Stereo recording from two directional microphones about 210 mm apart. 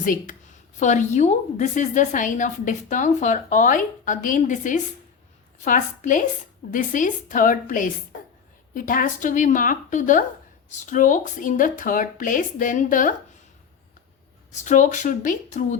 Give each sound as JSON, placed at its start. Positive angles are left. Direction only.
{"t": 0.0, "sound": "a woman's voice", "side_deg": 40}
{"t": 14.5, "sound": "a woman's voice", "side_deg": 35}